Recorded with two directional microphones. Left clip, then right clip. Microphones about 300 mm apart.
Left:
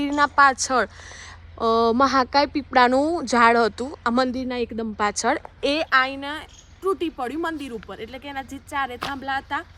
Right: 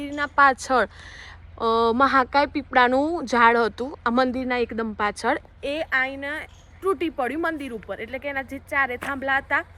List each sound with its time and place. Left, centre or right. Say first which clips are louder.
0.0 s a sound: left 7 dB; left
0.3 s a woman's voice: right 2 dB; centre
5.6 s a woman's voice: left 4 dB; centre